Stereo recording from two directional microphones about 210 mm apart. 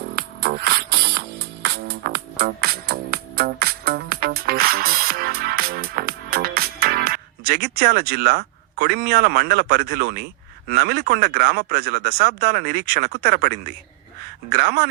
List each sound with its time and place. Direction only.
0.2 s music: 50° right (ahead or behind)
10.7 s speech: 50° right (ahead or behind)